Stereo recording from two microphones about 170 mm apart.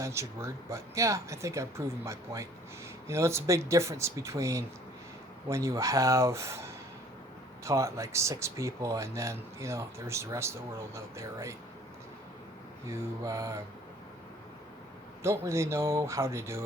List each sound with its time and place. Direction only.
0.0 s speech: 15° right (ahead or behind)
12.9 s mantra: 20° right (ahead or behind)
15.2 s speech: 15° right (ahead or behind)